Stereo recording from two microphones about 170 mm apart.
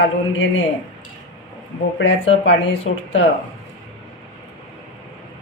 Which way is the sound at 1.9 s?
90° left.